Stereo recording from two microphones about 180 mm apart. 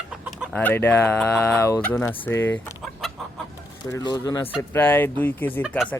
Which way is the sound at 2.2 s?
10° left (ahead or behind).